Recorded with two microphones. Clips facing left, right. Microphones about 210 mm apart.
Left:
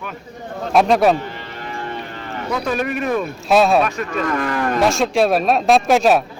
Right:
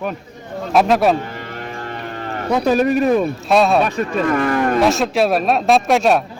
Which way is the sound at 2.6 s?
35° right (ahead or behind).